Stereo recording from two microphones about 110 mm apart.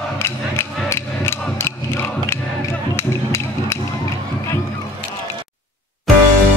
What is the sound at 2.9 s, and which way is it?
Music, 20° left (ahead or behind).